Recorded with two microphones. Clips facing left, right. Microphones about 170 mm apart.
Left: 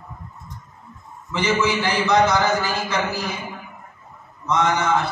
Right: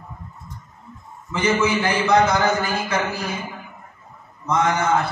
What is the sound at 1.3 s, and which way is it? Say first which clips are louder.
A man's voice: right 1 dB; 55° right (ahead or behind).